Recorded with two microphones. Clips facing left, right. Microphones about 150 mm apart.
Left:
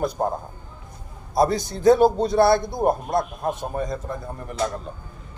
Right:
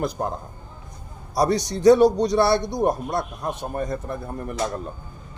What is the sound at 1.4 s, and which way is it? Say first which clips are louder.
A man's voice: even; 80° right.